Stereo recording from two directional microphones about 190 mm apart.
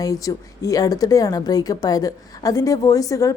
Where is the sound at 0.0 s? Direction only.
20° left (ahead or behind).